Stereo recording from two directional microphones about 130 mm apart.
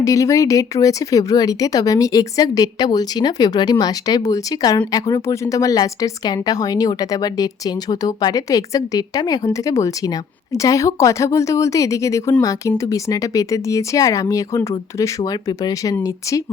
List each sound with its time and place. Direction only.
0.0 s a woman's voice: 25° left (ahead or behind)